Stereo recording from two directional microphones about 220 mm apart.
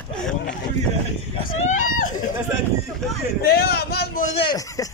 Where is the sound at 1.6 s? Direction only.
35° left (ahead or behind).